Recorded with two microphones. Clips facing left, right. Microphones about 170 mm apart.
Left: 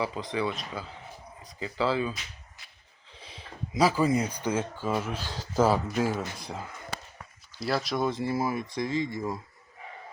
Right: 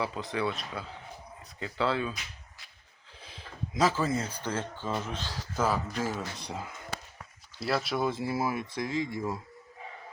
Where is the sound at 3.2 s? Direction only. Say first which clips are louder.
Even; centre (ahead or behind).